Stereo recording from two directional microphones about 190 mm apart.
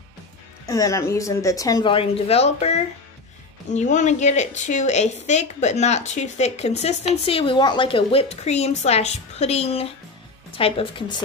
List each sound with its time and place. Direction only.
0.7 s a woman's voice: 15° left (ahead or behind)